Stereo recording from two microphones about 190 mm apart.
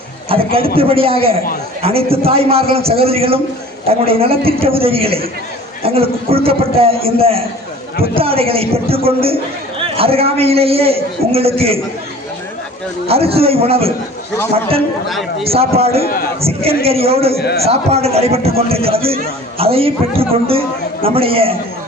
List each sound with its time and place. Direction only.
0.3 s a man's voice: 30° right (ahead or behind)
13.1 s a man's voice: 30° right (ahead or behind)
15.1 s a man's voice: centre (ahead or behind)
15.4 s a man's voice: 30° right (ahead or behind)